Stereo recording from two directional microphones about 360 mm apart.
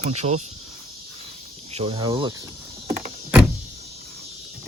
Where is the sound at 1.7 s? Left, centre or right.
Centre.